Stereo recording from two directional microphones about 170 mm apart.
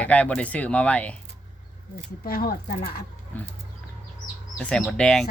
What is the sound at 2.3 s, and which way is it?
Speech, 60° left (ahead or behind).